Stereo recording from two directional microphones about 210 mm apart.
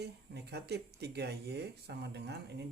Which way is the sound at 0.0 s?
50° right (ahead or behind).